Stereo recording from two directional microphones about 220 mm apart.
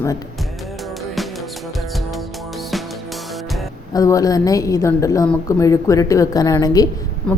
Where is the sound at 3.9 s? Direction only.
15° left (ahead or behind).